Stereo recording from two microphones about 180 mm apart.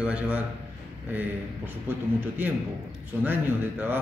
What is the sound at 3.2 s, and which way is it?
Speech, 10° right (ahead or behind).